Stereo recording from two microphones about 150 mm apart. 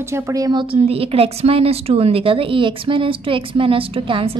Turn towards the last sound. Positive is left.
turn(degrees=-35)  # may be behind; listen again after turning